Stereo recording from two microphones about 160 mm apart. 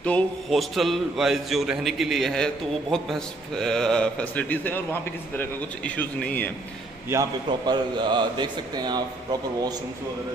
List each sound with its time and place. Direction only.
0.0 s a man's voice: 5° left (ahead or behind)
7.1 s a man's voice: 25° right (ahead or behind)